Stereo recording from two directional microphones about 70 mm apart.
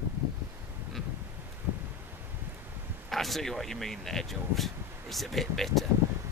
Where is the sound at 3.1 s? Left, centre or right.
Centre.